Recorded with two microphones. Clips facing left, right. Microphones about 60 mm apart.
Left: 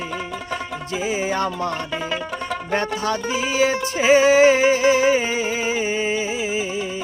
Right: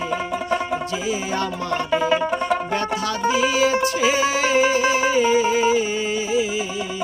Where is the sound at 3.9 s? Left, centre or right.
Left.